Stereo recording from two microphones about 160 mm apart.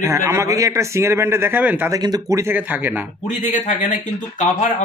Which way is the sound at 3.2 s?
50° left (ahead or behind).